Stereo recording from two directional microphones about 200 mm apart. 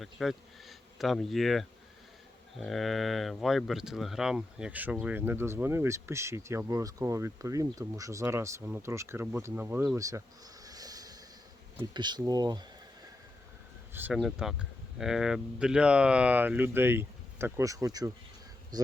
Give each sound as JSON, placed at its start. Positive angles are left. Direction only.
{"t": 0.0, "sound": "speech", "side_deg": 0}
{"t": 10.7, "sound": "train", "side_deg": -20}
{"t": 11.8, "sound": "speech", "side_deg": -20}
{"t": 13.9, "sound": "speech", "side_deg": -5}